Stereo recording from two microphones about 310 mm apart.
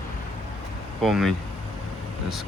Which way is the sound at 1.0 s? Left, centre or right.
Centre.